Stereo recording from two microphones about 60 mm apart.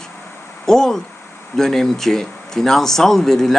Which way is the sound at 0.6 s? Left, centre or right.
Centre.